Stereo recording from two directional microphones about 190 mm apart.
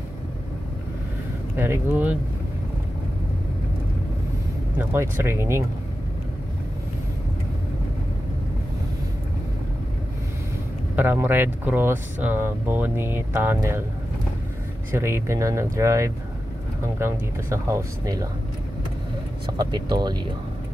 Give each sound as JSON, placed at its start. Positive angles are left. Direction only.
{"t": 1.6, "sound": "speech", "side_deg": -10}
{"t": 4.7, "sound": "speech", "side_deg": -10}
{"t": 11.0, "sound": "speech", "side_deg": -10}
{"t": 14.9, "sound": "speech", "side_deg": -15}
{"t": 19.5, "sound": "speech", "side_deg": -20}